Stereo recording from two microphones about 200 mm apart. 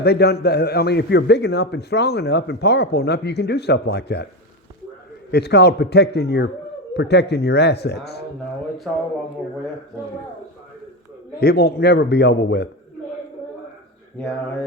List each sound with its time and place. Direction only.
0.0 s a man's voice: 55° left (ahead or behind)
5.3 s a man's voice: 55° left (ahead or behind)
8.9 s speech: 5° left (ahead or behind)
11.3 s a man's voice: 50° left (ahead or behind)